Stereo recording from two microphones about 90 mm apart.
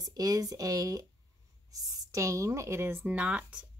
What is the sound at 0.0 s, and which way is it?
Speech, 40° right (ahead or behind).